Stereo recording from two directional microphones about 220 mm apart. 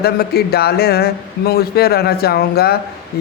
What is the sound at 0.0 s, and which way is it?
A man's voice, 45° left (ahead or behind).